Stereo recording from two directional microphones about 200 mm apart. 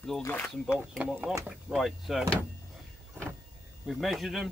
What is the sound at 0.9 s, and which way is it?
Speech, 5° right (ahead or behind).